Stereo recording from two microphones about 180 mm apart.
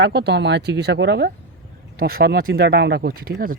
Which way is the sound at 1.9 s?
55° right (ahead or behind).